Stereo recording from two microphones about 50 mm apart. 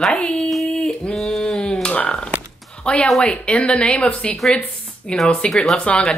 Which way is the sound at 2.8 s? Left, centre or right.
Left.